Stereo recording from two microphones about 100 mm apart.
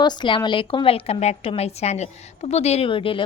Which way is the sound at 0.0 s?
50° left (ahead or behind).